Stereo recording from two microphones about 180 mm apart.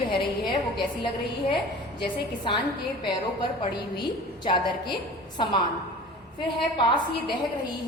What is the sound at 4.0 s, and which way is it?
A woman's voice, 25° left (ahead or behind).